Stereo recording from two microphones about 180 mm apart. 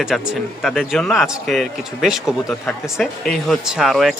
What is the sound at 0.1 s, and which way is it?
Speech, centre (ahead or behind).